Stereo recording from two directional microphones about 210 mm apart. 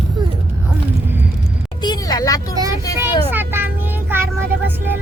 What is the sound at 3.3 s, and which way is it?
Vehicle, 10° right (ahead or behind).